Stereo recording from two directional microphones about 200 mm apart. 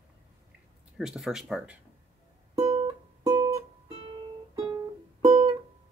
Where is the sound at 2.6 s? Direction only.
20° right (ahead or behind).